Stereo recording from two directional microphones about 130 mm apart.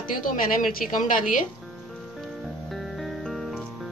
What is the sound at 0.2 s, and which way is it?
Speech, 90° left.